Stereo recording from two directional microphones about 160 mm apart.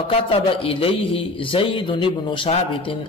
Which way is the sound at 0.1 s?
35° left (ahead or behind).